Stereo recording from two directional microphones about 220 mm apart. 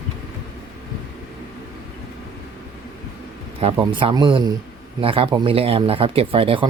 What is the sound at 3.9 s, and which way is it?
Speech, 20° right (ahead or behind).